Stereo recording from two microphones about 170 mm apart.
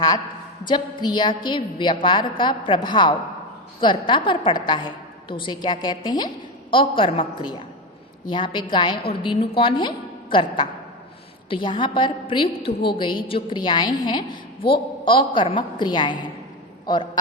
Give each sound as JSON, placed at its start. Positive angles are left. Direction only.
{"t": 0.7, "sound": "a woman's voice", "side_deg": 25}